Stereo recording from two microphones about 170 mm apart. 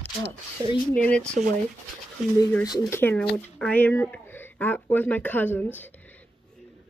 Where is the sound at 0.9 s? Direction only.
5° left (ahead or behind).